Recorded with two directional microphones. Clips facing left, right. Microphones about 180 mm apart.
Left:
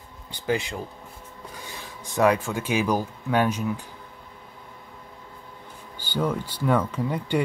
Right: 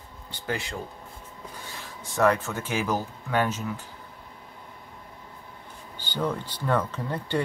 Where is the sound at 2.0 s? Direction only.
15° left (ahead or behind).